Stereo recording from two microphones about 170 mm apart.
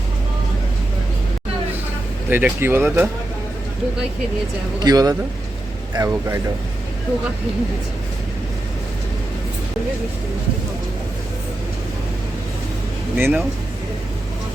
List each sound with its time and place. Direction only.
2.3 s speech: 10° right (ahead or behind)
4.8 s speech: 20° right (ahead or behind)
13.1 s speech: 10° right (ahead or behind)